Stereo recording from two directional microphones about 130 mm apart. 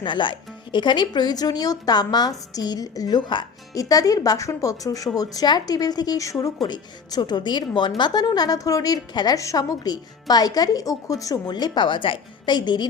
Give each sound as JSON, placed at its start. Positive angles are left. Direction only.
{"t": 0.0, "sound": "a woman's voice", "side_deg": 40}